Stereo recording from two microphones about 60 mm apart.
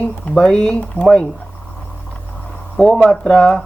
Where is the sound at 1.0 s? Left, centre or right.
Left.